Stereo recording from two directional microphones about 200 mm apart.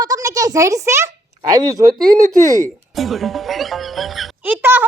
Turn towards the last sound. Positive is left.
turn(degrees=-10)  # may be behind; listen again after turning